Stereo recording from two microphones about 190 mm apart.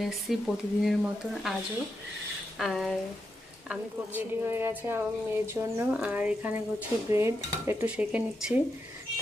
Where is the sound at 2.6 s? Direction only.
Centre (ahead or behind).